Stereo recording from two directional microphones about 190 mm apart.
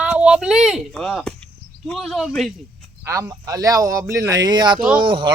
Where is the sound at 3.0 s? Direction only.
15° right (ahead or behind).